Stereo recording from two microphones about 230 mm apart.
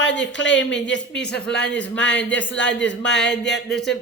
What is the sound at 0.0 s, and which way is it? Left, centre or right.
Speech, left.